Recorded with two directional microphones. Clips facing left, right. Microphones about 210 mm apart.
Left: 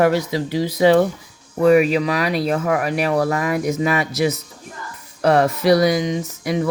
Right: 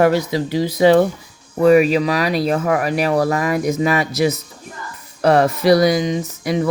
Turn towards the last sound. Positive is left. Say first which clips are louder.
# right 2 dB
turn(degrees=-35)  # may be behind; listen again after turning